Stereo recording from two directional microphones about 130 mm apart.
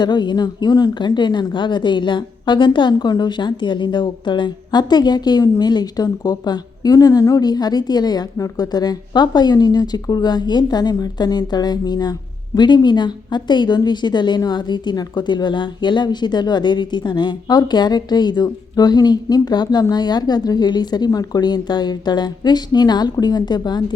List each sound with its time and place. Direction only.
0.0 s speech: 35° left (ahead or behind)